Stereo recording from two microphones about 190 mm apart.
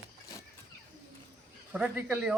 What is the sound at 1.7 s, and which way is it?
Speech, 5° right (ahead or behind).